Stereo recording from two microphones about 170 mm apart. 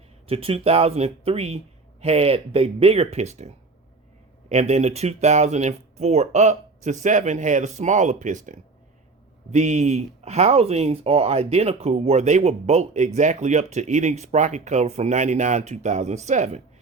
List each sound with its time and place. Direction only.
0.3 s speech: 35° right (ahead or behind)